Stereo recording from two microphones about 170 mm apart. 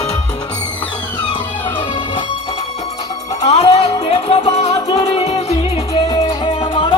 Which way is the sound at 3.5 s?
35° left (ahead or behind).